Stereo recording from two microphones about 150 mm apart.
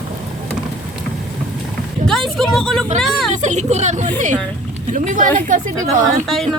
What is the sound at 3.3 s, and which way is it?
A woman's voice, 50° right (ahead or behind).